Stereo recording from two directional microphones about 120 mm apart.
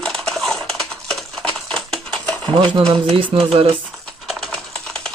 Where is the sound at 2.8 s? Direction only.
55° right (ahead or behind).